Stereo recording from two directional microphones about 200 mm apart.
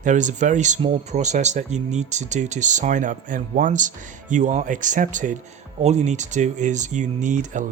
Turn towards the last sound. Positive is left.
turn(degrees=-40)  # may be behind; listen again after turning